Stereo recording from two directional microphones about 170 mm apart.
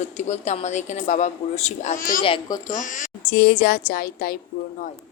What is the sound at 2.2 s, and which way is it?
Speech, 25° left (ahead or behind).